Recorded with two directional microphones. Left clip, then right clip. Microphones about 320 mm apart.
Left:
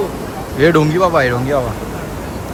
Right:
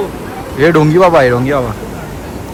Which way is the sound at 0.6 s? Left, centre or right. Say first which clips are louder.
Right 4 dB; centre.